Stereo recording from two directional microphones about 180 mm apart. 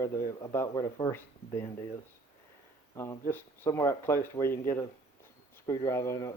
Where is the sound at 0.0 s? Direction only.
15° left (ahead or behind).